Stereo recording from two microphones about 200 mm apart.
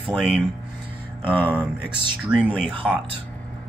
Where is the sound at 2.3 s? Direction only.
Centre (ahead or behind).